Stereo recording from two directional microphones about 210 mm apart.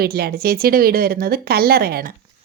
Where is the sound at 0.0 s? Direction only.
45° right (ahead or behind).